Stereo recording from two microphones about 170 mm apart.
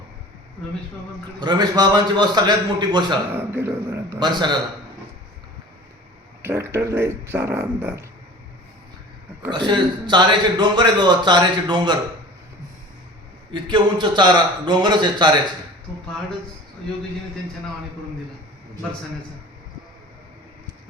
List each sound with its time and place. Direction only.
1.4 s a man's voice: 25° right (ahead or behind)
3.3 s speech: 15° right (ahead or behind)
4.2 s a man's voice: 25° right (ahead or behind)
6.4 s speech: 15° right (ahead or behind)
9.5 s a man's voice: 25° right (ahead or behind)
13.5 s a man's voice: 30° right (ahead or behind)